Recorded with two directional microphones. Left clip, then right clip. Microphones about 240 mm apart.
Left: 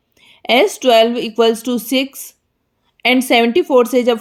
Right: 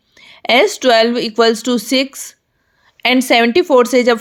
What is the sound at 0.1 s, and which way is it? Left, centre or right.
Speech, right.